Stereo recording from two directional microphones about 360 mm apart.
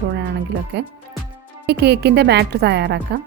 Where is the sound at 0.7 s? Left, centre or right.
Right.